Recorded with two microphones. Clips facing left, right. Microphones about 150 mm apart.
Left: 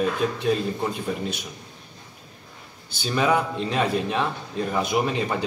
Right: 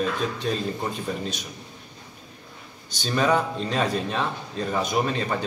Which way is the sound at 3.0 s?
10° left (ahead or behind).